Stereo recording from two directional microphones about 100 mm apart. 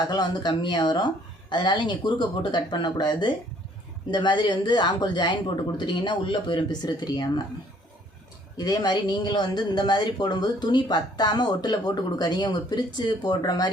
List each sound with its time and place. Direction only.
0.0 s speech: 45° left (ahead or behind)
8.5 s speech: 40° left (ahead or behind)